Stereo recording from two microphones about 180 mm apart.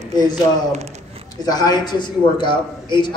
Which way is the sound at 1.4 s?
20° left (ahead or behind).